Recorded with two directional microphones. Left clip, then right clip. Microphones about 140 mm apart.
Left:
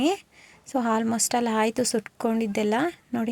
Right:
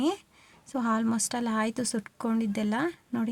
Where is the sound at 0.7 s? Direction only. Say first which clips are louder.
Left 4 dB; 15° left (ahead or behind).